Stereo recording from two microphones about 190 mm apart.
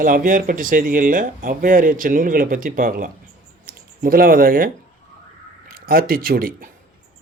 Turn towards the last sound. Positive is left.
turn(degrees=-50)  # may be behind; listen again after turning